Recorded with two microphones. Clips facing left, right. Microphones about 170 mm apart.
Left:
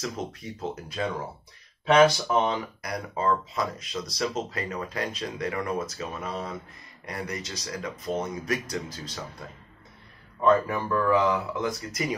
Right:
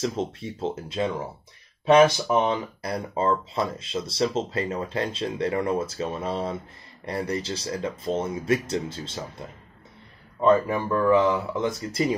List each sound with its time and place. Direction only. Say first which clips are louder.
0.0 s speech: right 6 dB; 25° right (ahead or behind)
10.4 s speech: right 2 dB; 20° right (ahead or behind)